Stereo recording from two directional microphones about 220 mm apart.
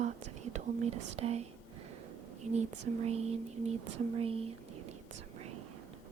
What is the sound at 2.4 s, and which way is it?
Speech, 90° right.